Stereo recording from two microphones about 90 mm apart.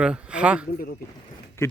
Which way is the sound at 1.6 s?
30° left (ahead or behind).